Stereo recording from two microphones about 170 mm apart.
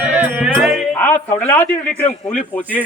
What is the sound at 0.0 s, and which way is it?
Music, 10° right (ahead or behind).